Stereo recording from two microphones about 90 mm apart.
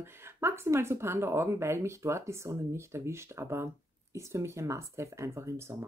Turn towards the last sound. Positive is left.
turn(degrees=-30)  # may be behind; listen again after turning